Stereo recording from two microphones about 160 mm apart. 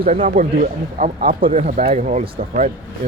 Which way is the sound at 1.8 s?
45° right (ahead or behind).